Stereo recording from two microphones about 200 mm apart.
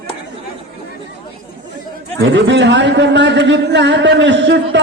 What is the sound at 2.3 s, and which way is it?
A man's voice, 65° right (ahead or behind).